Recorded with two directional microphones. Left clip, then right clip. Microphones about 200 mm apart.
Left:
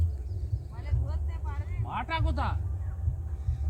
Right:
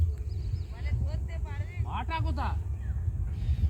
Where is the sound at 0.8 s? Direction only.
60° left (ahead or behind).